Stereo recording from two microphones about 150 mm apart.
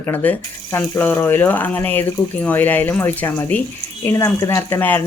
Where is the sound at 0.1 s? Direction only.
10° left (ahead or behind).